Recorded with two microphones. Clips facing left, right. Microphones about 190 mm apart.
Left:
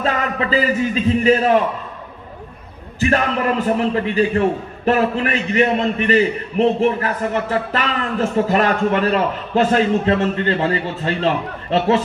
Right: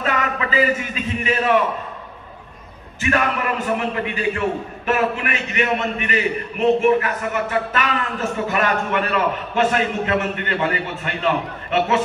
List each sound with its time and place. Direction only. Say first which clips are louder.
0.0 s a man's voice: left 2 dB; 35° left (ahead or behind)
3.0 s a man's voice: left 3 dB; 35° left (ahead or behind)